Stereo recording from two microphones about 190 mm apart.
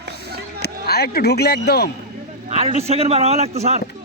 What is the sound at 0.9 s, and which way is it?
A man's voice, 55° left (ahead or behind).